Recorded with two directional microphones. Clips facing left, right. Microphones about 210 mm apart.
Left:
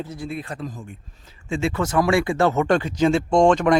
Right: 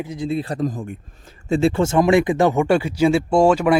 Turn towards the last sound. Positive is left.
turn(degrees=-5)  # may be behind; listen again after turning